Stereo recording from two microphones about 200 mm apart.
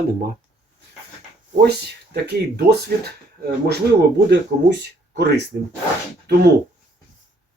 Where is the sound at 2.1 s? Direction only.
55° right (ahead or behind).